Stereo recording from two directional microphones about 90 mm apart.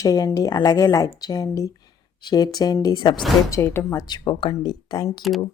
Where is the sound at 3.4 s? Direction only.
30° left (ahead or behind).